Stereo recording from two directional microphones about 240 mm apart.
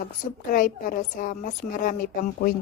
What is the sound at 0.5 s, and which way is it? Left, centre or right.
A woman's voice, left.